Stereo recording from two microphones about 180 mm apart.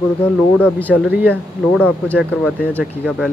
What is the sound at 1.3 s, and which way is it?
Speech, 5° left (ahead or behind).